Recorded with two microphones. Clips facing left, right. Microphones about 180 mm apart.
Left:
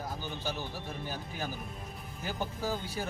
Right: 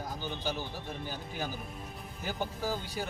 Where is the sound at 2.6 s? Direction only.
10° right (ahead or behind).